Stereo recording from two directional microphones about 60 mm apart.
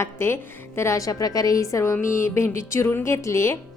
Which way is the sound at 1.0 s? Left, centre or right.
Left.